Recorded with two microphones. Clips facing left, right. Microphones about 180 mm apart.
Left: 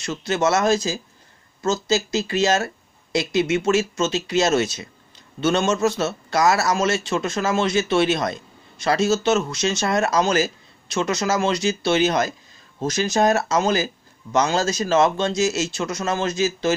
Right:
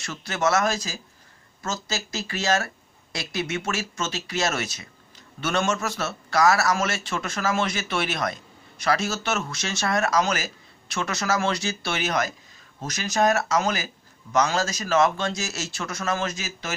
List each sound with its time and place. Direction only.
0.0 s a man's voice: 25° left (ahead or behind)